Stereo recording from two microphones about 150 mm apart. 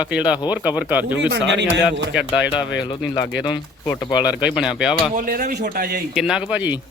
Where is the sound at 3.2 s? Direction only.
20° left (ahead or behind).